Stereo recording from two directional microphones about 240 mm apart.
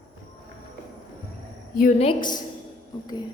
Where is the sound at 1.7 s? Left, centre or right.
Left.